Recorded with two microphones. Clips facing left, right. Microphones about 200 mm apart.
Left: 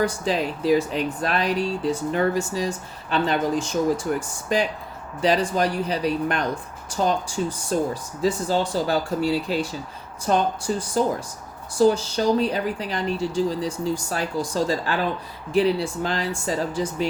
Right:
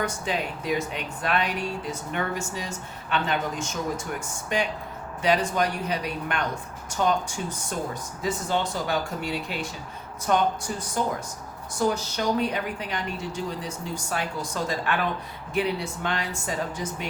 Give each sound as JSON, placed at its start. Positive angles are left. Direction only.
{"t": 0.0, "sound": "speech", "side_deg": 35}